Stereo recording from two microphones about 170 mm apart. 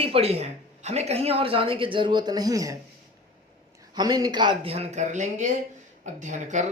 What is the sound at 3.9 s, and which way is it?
Speech, 25° right (ahead or behind).